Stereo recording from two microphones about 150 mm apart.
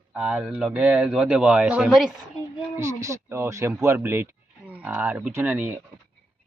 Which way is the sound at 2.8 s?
20° right (ahead or behind).